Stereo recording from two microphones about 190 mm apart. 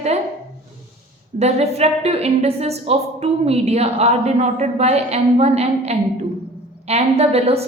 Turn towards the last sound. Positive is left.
turn(degrees=-30)  # may be behind; listen again after turning